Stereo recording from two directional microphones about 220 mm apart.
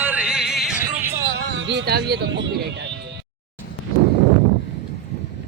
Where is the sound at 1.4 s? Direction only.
55° right (ahead or behind).